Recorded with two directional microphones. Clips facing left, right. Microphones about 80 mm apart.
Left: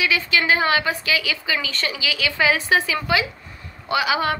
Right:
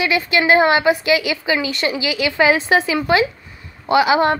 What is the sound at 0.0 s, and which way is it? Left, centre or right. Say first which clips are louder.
A woman's voice: right 4 dB; right.